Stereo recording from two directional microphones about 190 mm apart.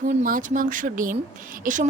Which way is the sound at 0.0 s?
40° right (ahead or behind).